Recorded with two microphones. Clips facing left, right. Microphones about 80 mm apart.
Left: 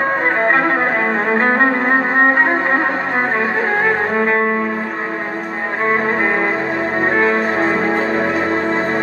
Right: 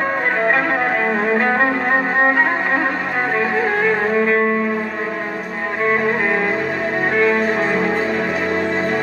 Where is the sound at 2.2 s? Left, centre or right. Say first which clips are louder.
Left 2 dB; left.